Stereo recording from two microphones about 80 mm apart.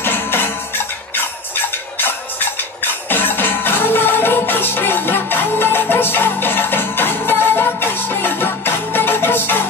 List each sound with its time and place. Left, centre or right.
0.0 s music: left